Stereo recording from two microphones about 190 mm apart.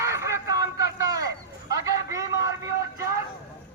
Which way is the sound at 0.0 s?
15° right (ahead or behind).